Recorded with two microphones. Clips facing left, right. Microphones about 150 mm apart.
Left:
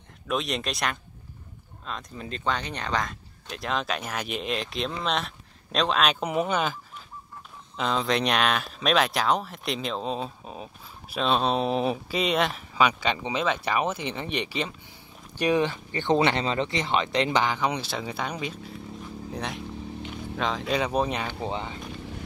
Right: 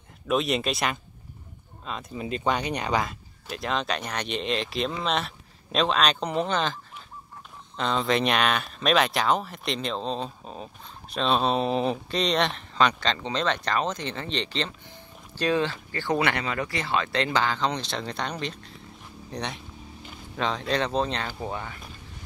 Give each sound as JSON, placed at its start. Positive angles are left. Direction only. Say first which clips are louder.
{"t": 0.3, "sound": "speech", "louder": "right 4 dB", "side_deg": 0}